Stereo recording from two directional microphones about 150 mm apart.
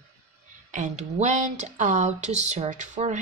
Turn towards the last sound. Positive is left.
turn(degrees=-50)  # may be behind; listen again after turning